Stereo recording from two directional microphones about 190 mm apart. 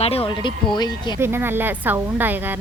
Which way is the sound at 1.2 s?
10° right (ahead or behind).